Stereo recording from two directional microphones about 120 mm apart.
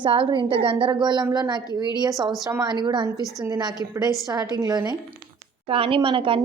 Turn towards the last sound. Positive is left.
turn(degrees=-45)  # may be behind; listen again after turning